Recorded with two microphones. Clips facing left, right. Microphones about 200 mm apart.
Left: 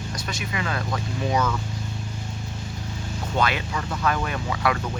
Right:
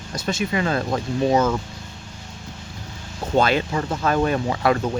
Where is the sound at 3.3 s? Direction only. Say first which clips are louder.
Right 6 dB; 30° right (ahead or behind).